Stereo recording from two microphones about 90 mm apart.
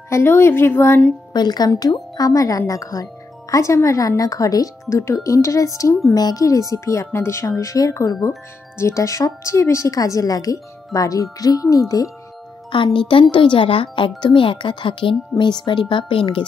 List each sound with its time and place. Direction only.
0.1 s a woman's voice: 30° left (ahead or behind)
1.3 s a woman's voice: 50° left (ahead or behind)
12.7 s speech: 65° left (ahead or behind)